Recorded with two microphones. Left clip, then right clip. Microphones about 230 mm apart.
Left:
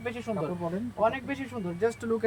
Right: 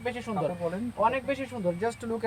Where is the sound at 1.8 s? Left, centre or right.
Centre.